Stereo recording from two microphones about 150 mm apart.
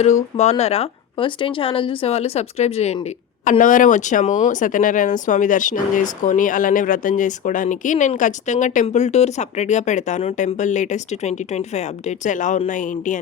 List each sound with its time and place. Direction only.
0.0 s speech: 45° left (ahead or behind)
3.6 s speech: 60° left (ahead or behind)